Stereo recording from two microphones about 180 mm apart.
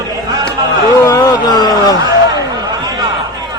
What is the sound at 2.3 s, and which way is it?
Chatter, 20° right (ahead or behind).